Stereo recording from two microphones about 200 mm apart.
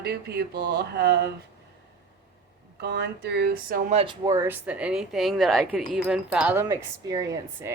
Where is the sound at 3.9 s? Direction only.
30° right (ahead or behind).